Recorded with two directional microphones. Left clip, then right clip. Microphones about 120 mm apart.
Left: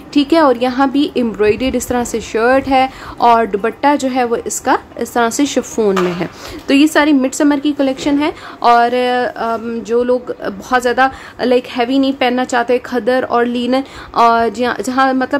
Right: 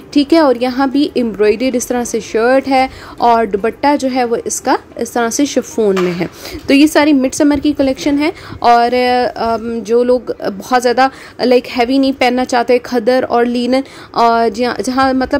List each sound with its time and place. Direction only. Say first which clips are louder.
0.1 s a woman's voice: right 1 dB; 20° right (ahead or behind)
6.7 s a woman's voice: right 1 dB; 25° right (ahead or behind)